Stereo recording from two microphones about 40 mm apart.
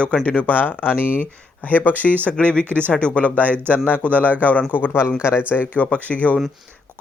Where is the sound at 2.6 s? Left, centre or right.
Right.